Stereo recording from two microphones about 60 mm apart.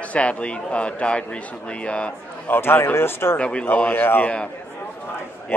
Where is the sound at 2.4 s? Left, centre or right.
Left.